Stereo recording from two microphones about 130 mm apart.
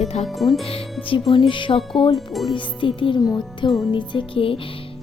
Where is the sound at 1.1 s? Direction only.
40° left (ahead or behind).